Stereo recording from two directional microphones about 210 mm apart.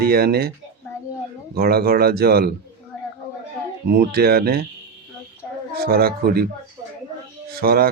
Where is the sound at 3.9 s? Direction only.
50° right (ahead or behind).